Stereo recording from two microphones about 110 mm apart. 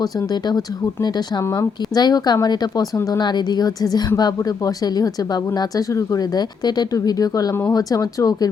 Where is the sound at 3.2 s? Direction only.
40° left (ahead or behind).